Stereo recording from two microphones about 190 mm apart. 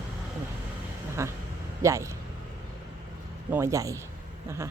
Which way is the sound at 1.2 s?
15° right (ahead or behind).